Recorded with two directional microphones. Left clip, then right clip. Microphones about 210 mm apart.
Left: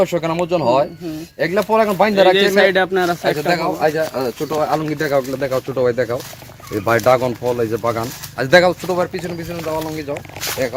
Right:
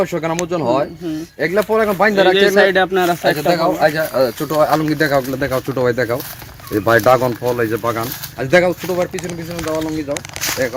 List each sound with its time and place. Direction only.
0.0 s speech: 45° left (ahead or behind)
2.3 s speech: 15° left (ahead or behind)
3.4 s speech: 15° right (ahead or behind)
3.8 s speech: 35° right (ahead or behind); by 6.1 s 55° right (ahead or behind)
6.8 s speech: 30° right (ahead or behind)
7.1 s speech: 20° right (ahead or behind)
7.4 s speech: 5° right (ahead or behind)
8.4 s speech: 30° left (ahead or behind)